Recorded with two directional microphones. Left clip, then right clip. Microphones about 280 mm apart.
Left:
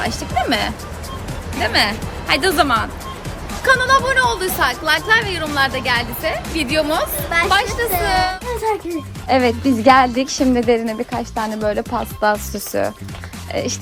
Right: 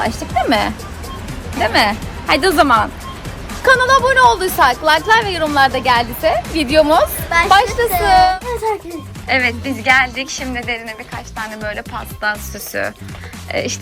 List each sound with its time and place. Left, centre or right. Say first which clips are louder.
0.0 s speech: right 3 dB; centre
3.5 s speech: right 3 dB; centre
7.3 s a woman's voice: right 3 dB; centre
8.0 s speech: right 10 dB; centre
9.2 s speech: even; centre